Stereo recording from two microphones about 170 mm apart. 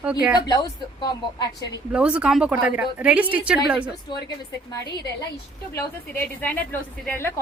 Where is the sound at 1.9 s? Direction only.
5° right (ahead or behind).